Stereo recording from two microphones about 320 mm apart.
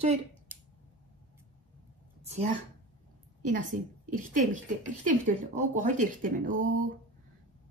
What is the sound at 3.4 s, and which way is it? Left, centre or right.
A woman's voice, right.